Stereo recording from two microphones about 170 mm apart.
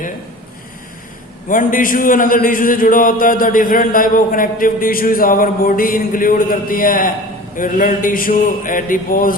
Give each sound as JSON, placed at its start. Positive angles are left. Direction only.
{"t": 1.5, "sound": "a man's voice", "side_deg": 55}